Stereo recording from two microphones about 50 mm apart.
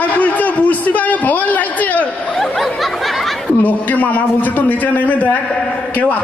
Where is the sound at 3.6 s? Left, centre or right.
Left.